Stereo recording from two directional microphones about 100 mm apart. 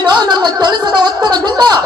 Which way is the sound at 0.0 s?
50° right (ahead or behind).